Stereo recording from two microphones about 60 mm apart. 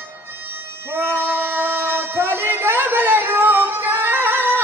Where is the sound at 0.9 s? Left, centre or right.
Right.